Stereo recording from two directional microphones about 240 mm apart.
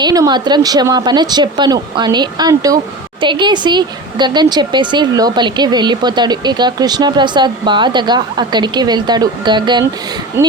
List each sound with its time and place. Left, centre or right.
0.0 s speech: centre